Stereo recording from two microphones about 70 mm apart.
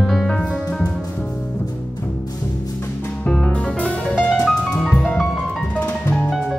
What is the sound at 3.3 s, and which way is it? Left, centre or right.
Music, centre.